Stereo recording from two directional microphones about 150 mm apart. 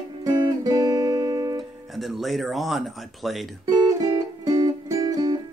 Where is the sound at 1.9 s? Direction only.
Centre (ahead or behind).